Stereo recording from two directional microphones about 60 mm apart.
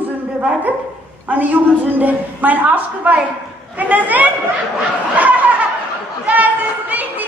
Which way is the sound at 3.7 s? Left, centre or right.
Right.